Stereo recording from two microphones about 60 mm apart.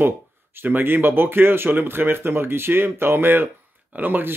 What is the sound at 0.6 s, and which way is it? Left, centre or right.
Speech, right.